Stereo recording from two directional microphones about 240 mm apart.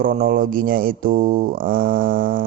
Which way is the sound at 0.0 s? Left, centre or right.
Right.